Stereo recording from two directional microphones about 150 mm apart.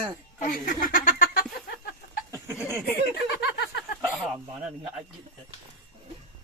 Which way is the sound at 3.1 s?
90° left.